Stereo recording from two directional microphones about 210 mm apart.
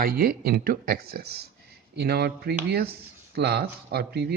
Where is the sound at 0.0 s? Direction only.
45° right (ahead or behind).